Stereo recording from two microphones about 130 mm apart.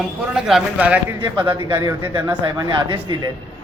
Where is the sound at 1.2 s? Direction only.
35° right (ahead or behind).